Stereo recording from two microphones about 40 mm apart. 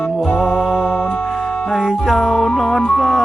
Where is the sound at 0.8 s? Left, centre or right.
Left.